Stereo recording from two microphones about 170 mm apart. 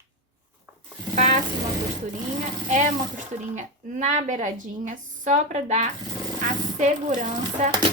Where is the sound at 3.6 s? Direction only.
45° right (ahead or behind).